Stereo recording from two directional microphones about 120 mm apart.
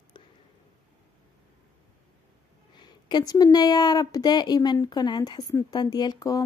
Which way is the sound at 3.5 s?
35° left (ahead or behind).